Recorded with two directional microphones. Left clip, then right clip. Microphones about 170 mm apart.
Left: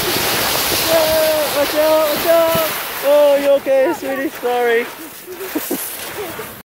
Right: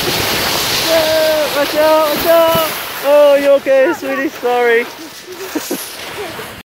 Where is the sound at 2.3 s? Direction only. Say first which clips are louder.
Right 4 dB; 30° right (ahead or behind).